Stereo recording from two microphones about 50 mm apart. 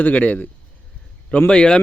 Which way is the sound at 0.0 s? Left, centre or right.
Left.